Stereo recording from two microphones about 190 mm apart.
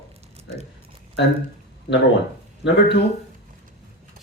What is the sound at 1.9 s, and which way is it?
Speech, 65° left (ahead or behind).